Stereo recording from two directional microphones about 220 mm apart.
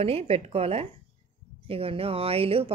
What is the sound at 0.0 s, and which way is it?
A woman's voice, 25° right (ahead or behind).